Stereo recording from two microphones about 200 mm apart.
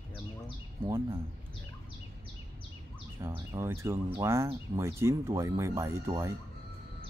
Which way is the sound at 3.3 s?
15° right (ahead or behind).